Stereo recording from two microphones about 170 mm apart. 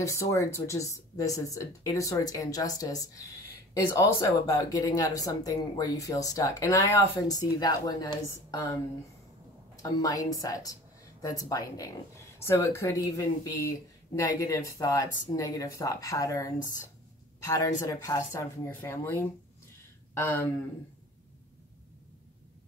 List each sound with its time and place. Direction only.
0.0 s speech: 15° left (ahead or behind)
9.8 s a woman's voice: 20° left (ahead or behind)